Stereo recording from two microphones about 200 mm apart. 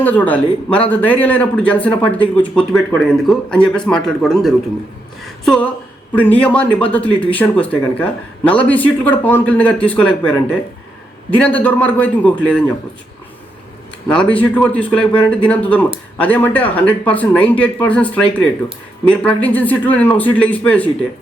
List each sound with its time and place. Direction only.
0.0 s speech: 10° left (ahead or behind)
14.1 s speech: 5° left (ahead or behind)